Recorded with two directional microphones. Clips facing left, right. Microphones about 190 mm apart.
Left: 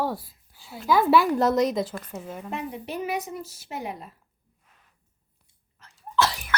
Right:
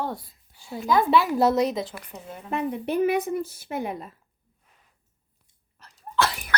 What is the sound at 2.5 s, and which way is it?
Speech, 55° right (ahead or behind).